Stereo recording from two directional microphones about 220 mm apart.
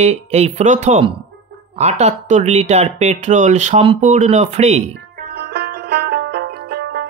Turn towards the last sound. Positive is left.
turn(degrees=-50)  # may be behind; listen again after turning